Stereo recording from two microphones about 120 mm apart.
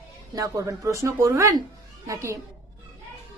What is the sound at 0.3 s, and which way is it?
A man's voice, 30° right (ahead or behind).